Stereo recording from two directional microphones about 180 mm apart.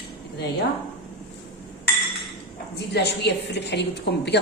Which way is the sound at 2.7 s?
70° left (ahead or behind).